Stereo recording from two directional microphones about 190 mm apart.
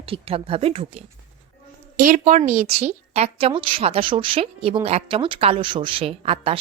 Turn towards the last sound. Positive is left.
turn(degrees=-30)  # may be behind; listen again after turning